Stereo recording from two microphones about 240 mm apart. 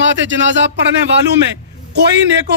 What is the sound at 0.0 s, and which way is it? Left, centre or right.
Speech, right.